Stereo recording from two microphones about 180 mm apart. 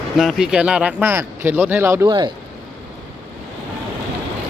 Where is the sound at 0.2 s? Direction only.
Centre (ahead or behind); by 2.3 s 25° right (ahead or behind).